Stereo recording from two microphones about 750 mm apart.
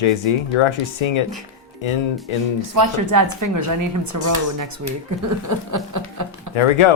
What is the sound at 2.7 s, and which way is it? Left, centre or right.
Speech, right.